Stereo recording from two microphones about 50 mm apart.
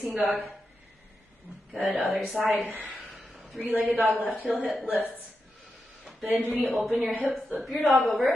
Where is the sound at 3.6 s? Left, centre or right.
Right.